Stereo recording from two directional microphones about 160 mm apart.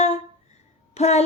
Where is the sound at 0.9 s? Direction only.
40° left (ahead or behind).